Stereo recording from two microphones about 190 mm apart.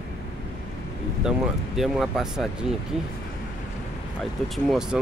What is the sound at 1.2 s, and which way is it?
Speech, centre (ahead or behind).